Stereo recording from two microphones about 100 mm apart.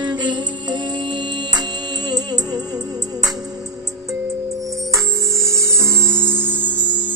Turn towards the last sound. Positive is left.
turn(degrees=-20)  # may be behind; listen again after turning